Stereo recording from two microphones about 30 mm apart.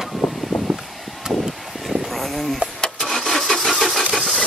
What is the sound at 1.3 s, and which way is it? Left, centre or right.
Vehicle, right.